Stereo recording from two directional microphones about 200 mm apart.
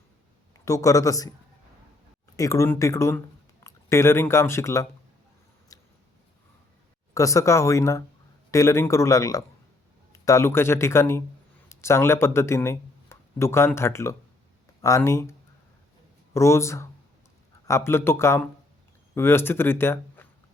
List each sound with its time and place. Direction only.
0.6 s speech: 15° left (ahead or behind)
2.3 s speech: 15° left (ahead or behind)
5.7 s a sound: 15° left (ahead or behind)
7.1 s speech: 15° left (ahead or behind)